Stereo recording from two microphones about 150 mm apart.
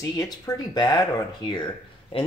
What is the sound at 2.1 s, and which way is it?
Speech, 35° left (ahead or behind).